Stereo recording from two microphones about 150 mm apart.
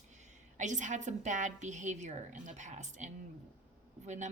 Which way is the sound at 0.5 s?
55° right (ahead or behind).